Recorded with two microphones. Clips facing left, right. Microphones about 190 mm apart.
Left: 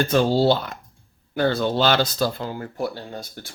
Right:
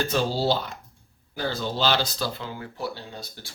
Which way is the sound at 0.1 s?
55° left (ahead or behind).